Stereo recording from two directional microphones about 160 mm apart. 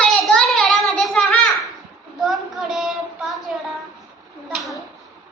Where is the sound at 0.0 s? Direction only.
5° left (ahead or behind).